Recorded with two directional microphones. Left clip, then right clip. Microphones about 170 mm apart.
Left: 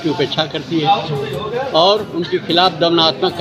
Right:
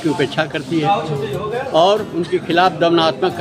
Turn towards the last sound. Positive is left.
turn(degrees=-20)  # may be behind; listen again after turning